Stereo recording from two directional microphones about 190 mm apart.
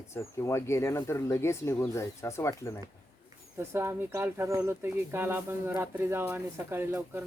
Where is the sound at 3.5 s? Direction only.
15° right (ahead or behind).